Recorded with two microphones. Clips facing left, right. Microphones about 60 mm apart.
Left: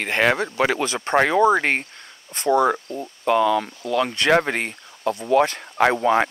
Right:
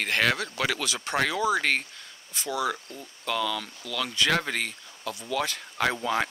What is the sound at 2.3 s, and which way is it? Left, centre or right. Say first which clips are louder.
Speech: left 11 dB; left.